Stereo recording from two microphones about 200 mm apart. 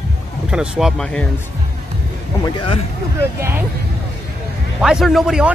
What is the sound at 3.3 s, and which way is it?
Speech, 10° right (ahead or behind).